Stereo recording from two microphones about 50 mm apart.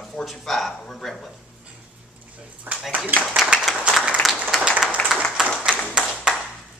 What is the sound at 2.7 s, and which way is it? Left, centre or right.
Speech, right.